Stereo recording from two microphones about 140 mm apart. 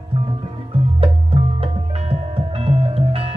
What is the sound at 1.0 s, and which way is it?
Music, 45° right (ahead or behind).